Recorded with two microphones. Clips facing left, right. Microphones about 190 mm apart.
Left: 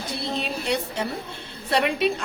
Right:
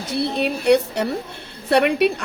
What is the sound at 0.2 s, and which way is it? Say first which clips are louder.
A woman's voice: right 9 dB; 65° right (ahead or behind).